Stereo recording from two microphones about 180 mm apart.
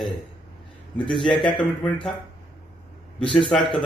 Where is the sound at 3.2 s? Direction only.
5° left (ahead or behind).